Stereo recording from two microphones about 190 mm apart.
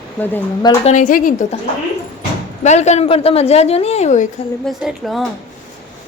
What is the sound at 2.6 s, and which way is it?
A woman's voice, 35° left (ahead or behind).